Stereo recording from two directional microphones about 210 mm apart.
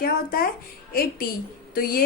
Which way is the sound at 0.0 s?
45° left (ahead or behind).